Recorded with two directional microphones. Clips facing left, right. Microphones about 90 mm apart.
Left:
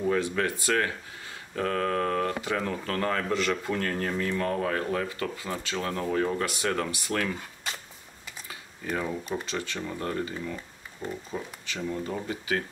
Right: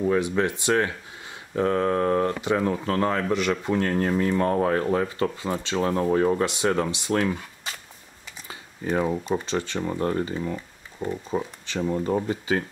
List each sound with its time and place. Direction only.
0.1 s speech: 20° right (ahead or behind)
8.5 s speech: 30° right (ahead or behind)